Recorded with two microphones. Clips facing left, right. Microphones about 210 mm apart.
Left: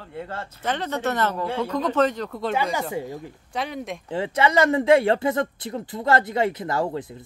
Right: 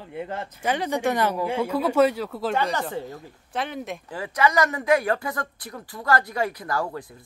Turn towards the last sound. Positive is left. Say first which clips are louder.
# left 3 dB
turn(degrees=20)  # may be behind; listen again after turning